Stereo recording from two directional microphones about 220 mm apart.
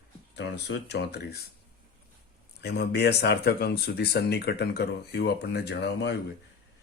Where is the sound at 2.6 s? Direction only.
50° left (ahead or behind).